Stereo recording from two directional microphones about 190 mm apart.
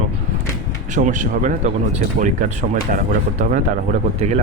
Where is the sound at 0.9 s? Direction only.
40° right (ahead or behind).